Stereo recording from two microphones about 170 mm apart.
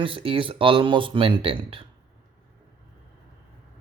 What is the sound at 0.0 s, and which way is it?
Speech, 30° right (ahead or behind).